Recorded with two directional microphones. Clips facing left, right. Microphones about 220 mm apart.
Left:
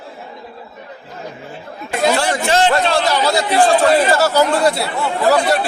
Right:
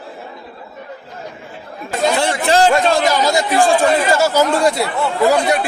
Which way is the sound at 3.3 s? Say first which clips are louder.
Even; 15° right (ahead or behind).